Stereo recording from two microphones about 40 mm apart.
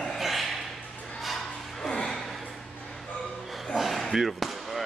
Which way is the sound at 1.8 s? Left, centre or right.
Centre.